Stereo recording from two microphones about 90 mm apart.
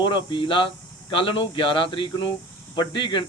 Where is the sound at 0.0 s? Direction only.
60° left (ahead or behind).